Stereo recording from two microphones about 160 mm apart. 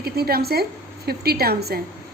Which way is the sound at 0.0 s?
75° right (ahead or behind).